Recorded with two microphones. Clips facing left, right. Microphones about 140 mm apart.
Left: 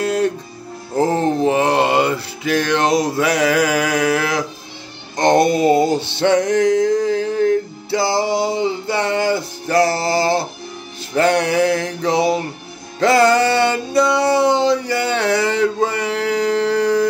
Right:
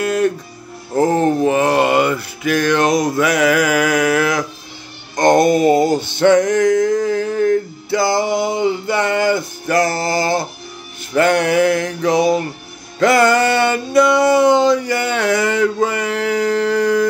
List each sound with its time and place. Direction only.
0.0 s music: 30° left (ahead or behind)
1.4 s music: 25° left (ahead or behind)
5.2 s mantra: 30° left (ahead or behind)
6.1 s music: 30° left (ahead or behind)
6.7 s a sound: 30° left (ahead or behind)
7.2 s male singing: 25° left (ahead or behind)
11.1 s music: 30° left (ahead or behind)
11.5 s mantra: 30° left (ahead or behind)
13.0 s a sound: 30° left (ahead or behind)